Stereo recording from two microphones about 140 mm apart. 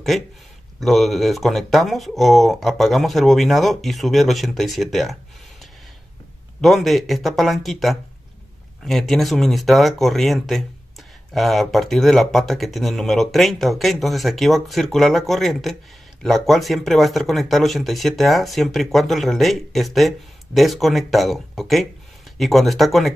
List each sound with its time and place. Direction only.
0.7 s speech: centre (ahead or behind)
6.6 s speech: centre (ahead or behind)